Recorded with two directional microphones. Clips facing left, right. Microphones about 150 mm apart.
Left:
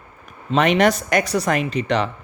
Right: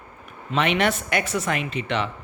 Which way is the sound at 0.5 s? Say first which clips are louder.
Left 6 dB; 40° left (ahead or behind).